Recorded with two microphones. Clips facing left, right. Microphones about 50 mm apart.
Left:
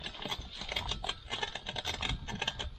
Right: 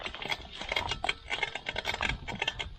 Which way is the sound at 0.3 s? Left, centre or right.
Right.